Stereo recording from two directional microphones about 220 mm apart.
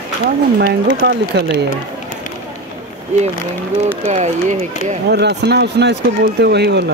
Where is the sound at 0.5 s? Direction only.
50° right (ahead or behind).